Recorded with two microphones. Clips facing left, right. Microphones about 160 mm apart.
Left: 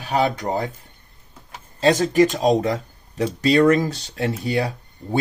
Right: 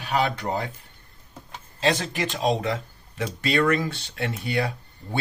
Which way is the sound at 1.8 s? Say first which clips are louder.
Left 9 dB; 40° left (ahead or behind).